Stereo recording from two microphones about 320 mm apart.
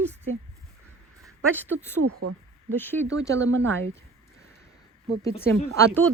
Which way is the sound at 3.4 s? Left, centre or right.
Right.